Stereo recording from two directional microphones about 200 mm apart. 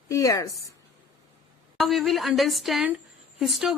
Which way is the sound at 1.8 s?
Centre (ahead or behind).